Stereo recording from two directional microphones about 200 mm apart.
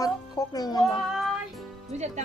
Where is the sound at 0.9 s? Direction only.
Centre (ahead or behind).